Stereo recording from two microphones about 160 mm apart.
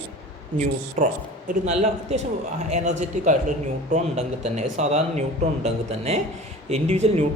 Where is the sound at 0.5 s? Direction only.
50° right (ahead or behind).